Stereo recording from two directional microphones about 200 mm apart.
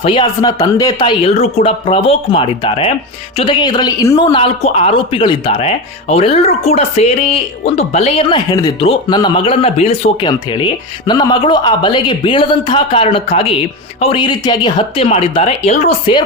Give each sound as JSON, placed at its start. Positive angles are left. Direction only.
{"t": 0.0, "sound": "speech", "side_deg": 25}